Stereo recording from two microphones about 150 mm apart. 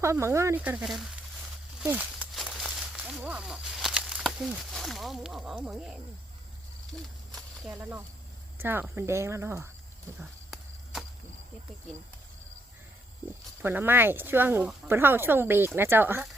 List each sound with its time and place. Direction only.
0.0 s speech: 20° right (ahead or behind); by 6.0 s 5° right (ahead or behind)
6.9 s a sound: centre (ahead or behind)
7.7 s speech: 15° right (ahead or behind)
13.6 s speech: 15° right (ahead or behind)